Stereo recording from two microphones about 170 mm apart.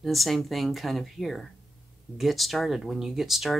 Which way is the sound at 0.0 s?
Centre (ahead or behind).